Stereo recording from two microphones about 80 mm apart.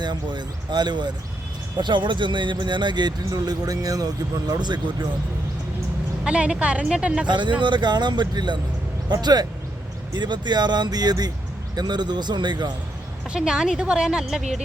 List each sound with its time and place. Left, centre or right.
0.0 s speech: right
1.8 s speech: right
6.2 s a woman's voice: centre
7.3 s speech: right
9.2 s speech: right
13.3 s a woman's voice: centre